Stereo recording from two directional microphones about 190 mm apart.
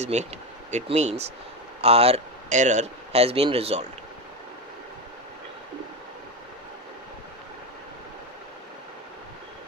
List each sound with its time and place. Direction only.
0.0 s speech: 35° right (ahead or behind)